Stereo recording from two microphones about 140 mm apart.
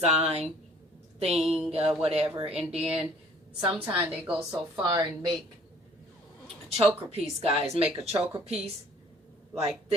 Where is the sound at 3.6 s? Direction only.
40° right (ahead or behind).